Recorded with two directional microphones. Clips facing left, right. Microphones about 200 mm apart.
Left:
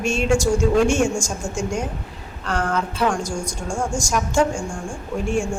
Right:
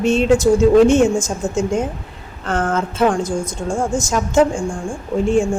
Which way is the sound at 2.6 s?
50° right (ahead or behind).